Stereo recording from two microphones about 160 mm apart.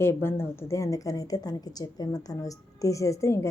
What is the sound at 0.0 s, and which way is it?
A woman's voice, 15° left (ahead or behind).